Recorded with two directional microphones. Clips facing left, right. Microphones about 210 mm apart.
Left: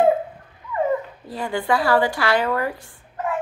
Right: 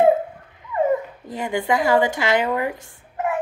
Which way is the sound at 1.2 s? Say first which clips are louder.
Right 1 dB; 20° right (ahead or behind).